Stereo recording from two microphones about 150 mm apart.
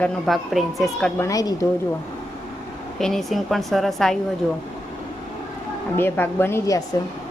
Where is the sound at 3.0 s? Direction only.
Centre (ahead or behind).